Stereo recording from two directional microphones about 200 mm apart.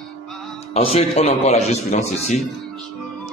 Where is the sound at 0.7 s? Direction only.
30° left (ahead or behind).